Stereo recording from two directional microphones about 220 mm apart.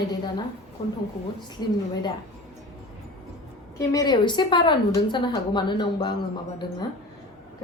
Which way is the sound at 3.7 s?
15° left (ahead or behind).